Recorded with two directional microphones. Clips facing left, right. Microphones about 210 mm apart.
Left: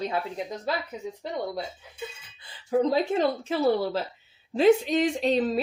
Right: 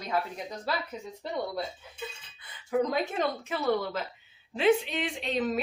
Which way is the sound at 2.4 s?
30° left (ahead or behind).